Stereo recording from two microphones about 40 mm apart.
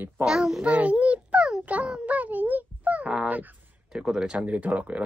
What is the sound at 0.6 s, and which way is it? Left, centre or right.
Speech, right.